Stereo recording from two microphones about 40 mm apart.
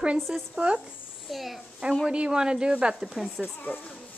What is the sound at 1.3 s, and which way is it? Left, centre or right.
Speech, centre.